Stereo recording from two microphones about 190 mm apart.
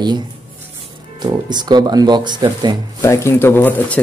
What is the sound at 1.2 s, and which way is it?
Speech, 25° right (ahead or behind).